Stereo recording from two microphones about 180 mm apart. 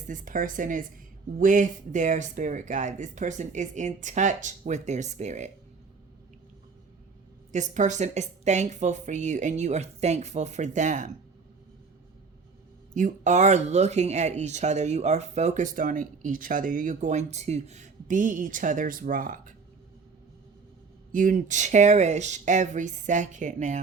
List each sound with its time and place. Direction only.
0.1 s speech: 45° right (ahead or behind)
7.5 s a woman's voice: 45° right (ahead or behind)
12.9 s speech: 45° right (ahead or behind)
21.1 s speech: 45° right (ahead or behind)